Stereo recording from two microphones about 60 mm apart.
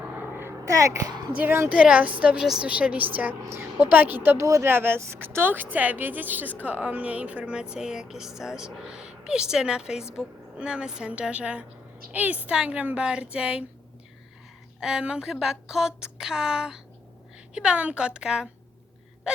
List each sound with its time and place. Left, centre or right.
0.0 s a sound: right
0.6 s a child's voice: right
1.7 s a woman's voice: right
2.4 s a woman's voice: centre
2.6 s a woman's voice: right
4.4 s a child's voice: right
4.6 s a woman's voice: right; by 13.7 s centre
14.8 s a woman's voice: centre